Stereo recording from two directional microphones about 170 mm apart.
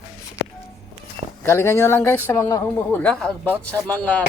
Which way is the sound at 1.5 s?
15° left (ahead or behind).